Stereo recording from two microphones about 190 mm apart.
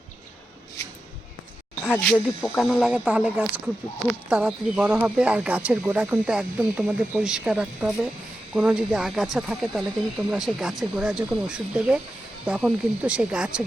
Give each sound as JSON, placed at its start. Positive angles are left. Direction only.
{"t": 1.8, "sound": "speech", "side_deg": 5}